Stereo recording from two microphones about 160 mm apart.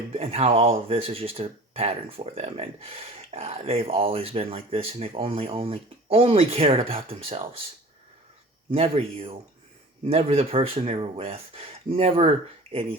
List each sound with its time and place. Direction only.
0.1 s speech: 40° right (ahead or behind)
8.7 s speech: 35° right (ahead or behind)